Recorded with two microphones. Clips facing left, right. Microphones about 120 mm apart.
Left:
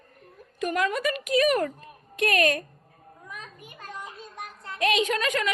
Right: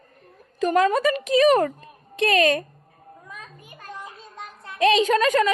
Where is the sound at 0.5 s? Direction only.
30° right (ahead or behind).